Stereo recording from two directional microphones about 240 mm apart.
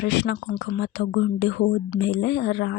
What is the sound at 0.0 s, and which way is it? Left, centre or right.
Speech, left.